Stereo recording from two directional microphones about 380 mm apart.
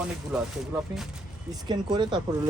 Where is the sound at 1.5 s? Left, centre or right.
Centre.